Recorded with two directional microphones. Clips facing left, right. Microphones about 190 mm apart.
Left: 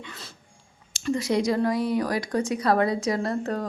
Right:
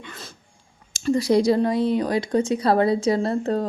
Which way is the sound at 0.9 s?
35° right (ahead or behind).